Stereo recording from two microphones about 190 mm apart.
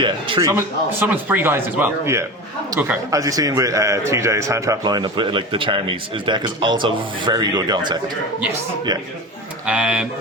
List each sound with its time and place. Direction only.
0.0 s a man's voice: 25° right (ahead or behind)
9.6 s speech: 5° right (ahead or behind)